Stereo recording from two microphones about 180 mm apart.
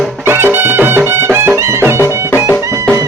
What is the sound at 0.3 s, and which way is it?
Music, 10° right (ahead or behind).